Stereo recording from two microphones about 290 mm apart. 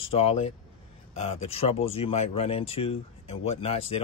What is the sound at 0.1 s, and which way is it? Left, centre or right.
Speech, left.